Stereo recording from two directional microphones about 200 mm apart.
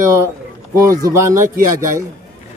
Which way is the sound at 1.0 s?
15° right (ahead or behind).